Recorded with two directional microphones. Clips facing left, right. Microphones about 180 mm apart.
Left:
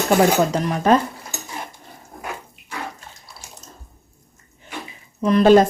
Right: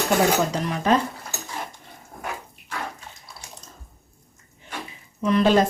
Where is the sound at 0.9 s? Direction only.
50° left (ahead or behind).